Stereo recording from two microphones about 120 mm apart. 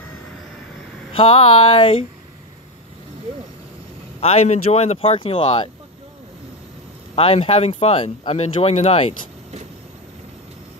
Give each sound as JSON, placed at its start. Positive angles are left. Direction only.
{"t": 1.1, "sound": "speech", "side_deg": 50}
{"t": 4.2, "sound": "speech", "side_deg": 60}
{"t": 7.2, "sound": "speech", "side_deg": 55}